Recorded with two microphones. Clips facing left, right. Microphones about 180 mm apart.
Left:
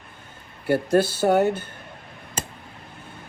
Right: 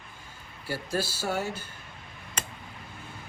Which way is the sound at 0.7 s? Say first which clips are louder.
Left 12 dB; 55° left (ahead or behind).